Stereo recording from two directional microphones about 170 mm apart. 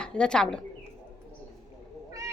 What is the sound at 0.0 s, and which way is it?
Speech, 5° left (ahead or behind).